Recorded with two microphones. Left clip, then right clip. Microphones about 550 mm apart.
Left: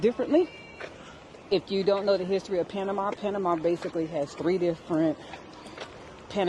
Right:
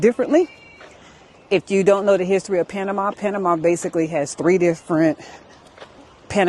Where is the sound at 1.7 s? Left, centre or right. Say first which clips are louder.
Right 10 dB; right.